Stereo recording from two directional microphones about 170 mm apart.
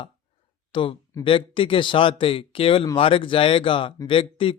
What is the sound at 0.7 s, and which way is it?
Speech, 30° left (ahead or behind).